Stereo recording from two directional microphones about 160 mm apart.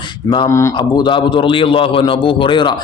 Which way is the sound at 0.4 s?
20° left (ahead or behind).